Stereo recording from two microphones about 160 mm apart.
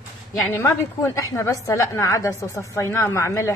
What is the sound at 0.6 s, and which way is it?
A woman's voice, 20° left (ahead or behind).